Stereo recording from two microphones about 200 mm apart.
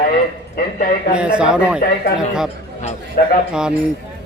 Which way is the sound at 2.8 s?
40° left (ahead or behind).